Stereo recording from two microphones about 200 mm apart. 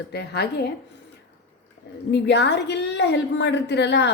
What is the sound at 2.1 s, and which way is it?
A woman's voice, 60° left (ahead or behind).